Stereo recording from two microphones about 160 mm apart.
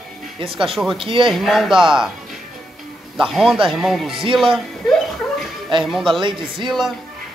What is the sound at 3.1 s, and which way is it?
Speech, 5° right (ahead or behind).